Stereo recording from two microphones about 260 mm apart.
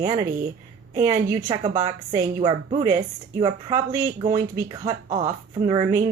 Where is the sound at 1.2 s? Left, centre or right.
Centre.